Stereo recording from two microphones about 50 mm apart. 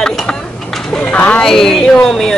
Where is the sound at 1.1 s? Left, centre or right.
Left.